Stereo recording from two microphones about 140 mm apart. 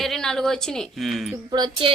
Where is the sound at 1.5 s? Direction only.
30° right (ahead or behind).